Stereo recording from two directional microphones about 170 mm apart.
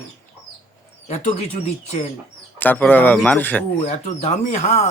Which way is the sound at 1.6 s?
40° left (ahead or behind).